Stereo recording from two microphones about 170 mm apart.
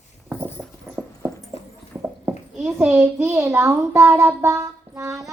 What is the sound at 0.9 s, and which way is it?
Clip-clop, 15° right (ahead or behind).